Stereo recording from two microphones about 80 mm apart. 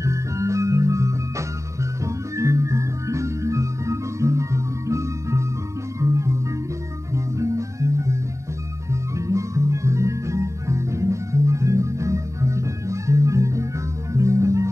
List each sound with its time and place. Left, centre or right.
0.0 s music: right